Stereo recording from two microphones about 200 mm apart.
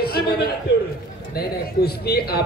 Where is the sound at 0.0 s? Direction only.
50° left (ahead or behind).